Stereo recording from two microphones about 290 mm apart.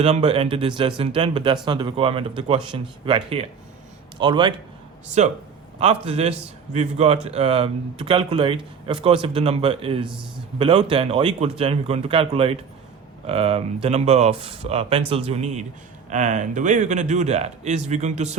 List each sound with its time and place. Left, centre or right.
0.0 s speech: right